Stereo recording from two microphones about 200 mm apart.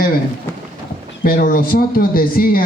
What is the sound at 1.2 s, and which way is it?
A man's voice, 45° left (ahead or behind).